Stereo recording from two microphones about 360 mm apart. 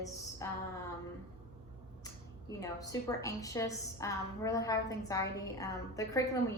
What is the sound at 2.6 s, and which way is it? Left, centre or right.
A woman's voice, centre.